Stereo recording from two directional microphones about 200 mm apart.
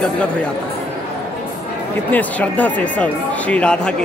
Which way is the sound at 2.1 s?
5° left (ahead or behind).